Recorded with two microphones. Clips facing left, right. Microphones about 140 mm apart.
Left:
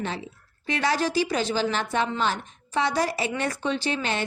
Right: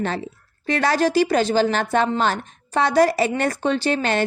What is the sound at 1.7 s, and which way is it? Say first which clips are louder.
Speech: right 5 dB; 70° right (ahead or behind).